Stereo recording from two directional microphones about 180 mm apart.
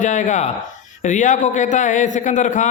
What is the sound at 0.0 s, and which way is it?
A man's voice, 45° left (ahead or behind).